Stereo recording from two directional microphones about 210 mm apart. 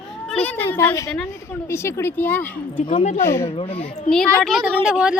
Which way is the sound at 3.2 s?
10° left (ahead or behind).